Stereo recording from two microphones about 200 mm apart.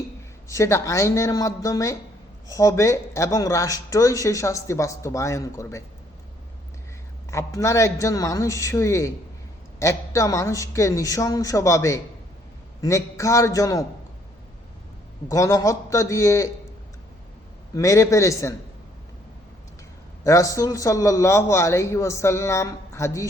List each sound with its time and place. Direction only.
0.4 s speech: 15° left (ahead or behind)
7.3 s speech: 15° left (ahead or behind)
15.3 s speech: 15° left (ahead or behind)
17.7 s speech: 15° left (ahead or behind)
20.2 s speech: 15° left (ahead or behind)